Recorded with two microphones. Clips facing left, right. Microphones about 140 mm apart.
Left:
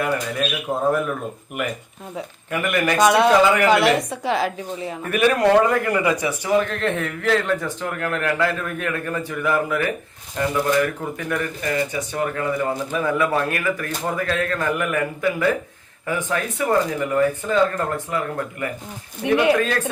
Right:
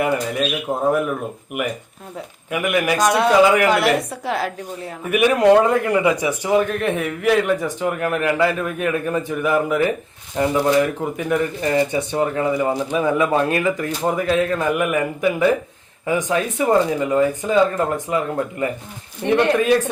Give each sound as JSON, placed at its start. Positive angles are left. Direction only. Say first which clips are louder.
{"t": 0.0, "sound": "speech", "louder": "right 3 dB", "side_deg": -20}
{"t": 2.1, "sound": "a woman's voice", "louder": "right 1 dB", "side_deg": -10}
{"t": 5.0, "sound": "speech", "louder": "right 3 dB", "side_deg": -15}
{"t": 19.2, "sound": "a woman's voice", "louder": "right 1 dB", "side_deg": 0}
{"t": 19.5, "sound": "speech", "louder": "right 5 dB", "side_deg": -15}